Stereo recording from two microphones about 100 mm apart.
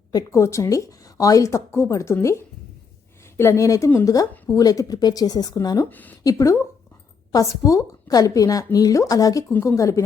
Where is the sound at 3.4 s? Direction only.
30° left (ahead or behind).